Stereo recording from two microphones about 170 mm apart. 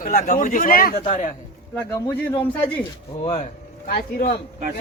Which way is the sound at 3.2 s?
35° left (ahead or behind).